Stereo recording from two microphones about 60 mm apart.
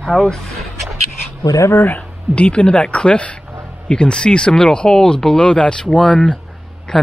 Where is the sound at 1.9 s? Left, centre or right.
Centre.